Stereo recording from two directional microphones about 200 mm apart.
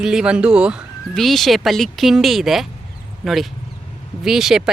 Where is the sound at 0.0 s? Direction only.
5° right (ahead or behind).